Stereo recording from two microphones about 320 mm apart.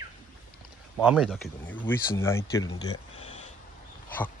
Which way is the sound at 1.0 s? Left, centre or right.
Centre.